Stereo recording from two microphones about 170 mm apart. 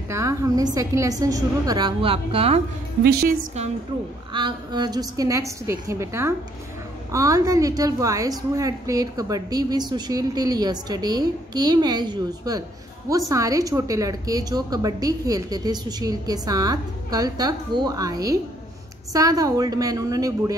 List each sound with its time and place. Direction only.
0.1 s a woman's voice: 15° right (ahead or behind); by 2.6 s 35° right (ahead or behind)
3.0 s a woman's voice: 65° right (ahead or behind)
4.3 s a woman's voice: 30° right (ahead or behind)